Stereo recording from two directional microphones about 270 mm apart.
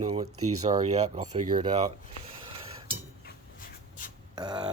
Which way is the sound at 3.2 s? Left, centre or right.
Left.